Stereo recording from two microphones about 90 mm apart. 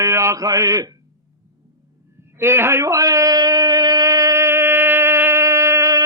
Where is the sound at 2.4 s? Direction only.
30° right (ahead or behind).